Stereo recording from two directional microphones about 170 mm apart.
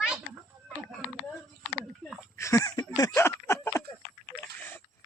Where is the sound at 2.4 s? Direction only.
20° left (ahead or behind).